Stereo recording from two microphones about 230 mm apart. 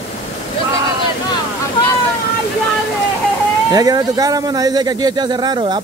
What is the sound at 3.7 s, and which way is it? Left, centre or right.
Speech, centre.